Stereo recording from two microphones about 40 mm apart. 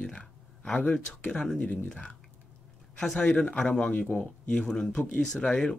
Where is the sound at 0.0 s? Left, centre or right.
Left.